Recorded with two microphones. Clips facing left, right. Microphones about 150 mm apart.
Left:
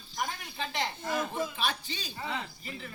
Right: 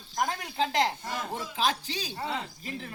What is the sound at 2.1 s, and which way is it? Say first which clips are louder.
Speech: right 2 dB; 35° right (ahead or behind).